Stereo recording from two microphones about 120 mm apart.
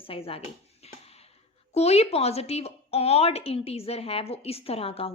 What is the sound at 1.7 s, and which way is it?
A woman's voice, 60° left (ahead or behind).